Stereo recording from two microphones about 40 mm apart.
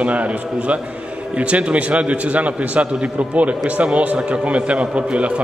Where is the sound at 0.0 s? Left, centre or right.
Right.